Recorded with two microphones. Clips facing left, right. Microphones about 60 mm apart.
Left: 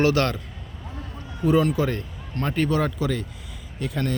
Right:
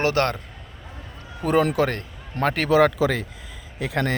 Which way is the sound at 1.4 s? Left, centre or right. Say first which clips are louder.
Right 1 dB; right.